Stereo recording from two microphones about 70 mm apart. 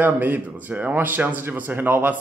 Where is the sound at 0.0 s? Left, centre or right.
Right.